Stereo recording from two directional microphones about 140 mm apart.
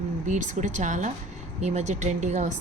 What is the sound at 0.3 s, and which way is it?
A woman's voice, 65° right (ahead or behind).